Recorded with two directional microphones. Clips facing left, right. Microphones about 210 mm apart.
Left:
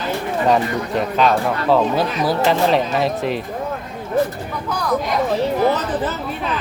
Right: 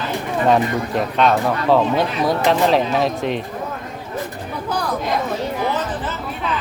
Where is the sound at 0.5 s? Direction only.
Centre (ahead or behind).